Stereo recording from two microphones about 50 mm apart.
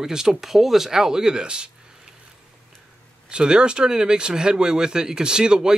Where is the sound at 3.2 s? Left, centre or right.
Centre.